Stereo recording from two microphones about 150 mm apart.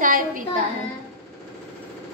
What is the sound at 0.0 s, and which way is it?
Child singing, 65° right (ahead or behind).